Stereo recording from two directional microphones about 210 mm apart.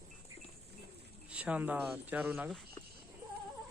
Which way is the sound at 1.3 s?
5° right (ahead or behind).